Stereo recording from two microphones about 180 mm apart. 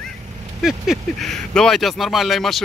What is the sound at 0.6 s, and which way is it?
Speech, centre (ahead or behind).